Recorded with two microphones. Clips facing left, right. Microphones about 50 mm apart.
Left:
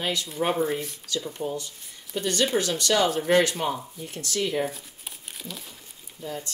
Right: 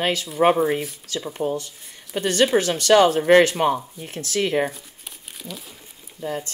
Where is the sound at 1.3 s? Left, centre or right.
Right.